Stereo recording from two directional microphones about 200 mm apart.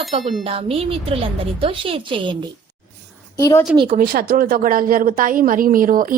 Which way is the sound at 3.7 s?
25° right (ahead or behind).